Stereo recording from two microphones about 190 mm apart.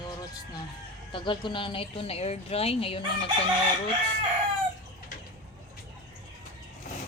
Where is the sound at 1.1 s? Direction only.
25° left (ahead or behind).